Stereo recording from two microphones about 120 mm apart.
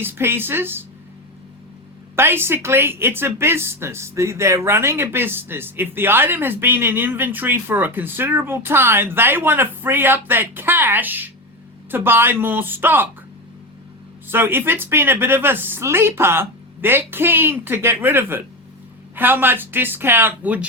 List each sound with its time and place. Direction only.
0.0 s speech: 20° right (ahead or behind)
2.1 s speech: 20° right (ahead or behind)
14.3 s speech: 20° right (ahead or behind)